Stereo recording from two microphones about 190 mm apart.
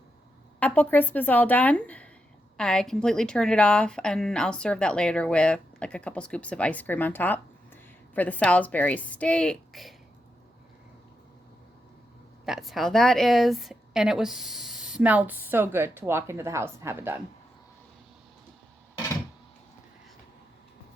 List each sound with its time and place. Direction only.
0.6 s a woman's voice: 10° left (ahead or behind)
12.5 s a woman's voice: centre (ahead or behind)